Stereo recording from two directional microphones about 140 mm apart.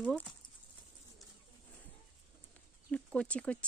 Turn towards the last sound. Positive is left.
turn(degrees=10)  # may be behind; listen again after turning